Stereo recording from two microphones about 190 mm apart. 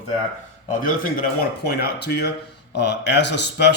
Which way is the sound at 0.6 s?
45° left (ahead or behind).